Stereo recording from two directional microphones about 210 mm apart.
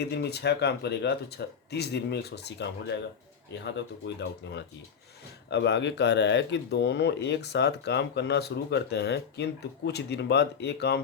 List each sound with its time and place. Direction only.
0.0 s speech: 50° left (ahead or behind)